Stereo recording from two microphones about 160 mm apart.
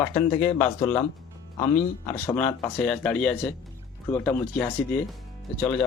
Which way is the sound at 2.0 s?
15° left (ahead or behind).